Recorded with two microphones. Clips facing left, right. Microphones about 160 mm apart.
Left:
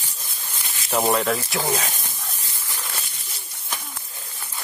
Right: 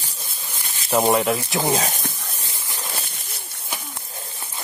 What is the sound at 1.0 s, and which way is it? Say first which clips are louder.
Speech: right 1 dB; 15° right (ahead or behind).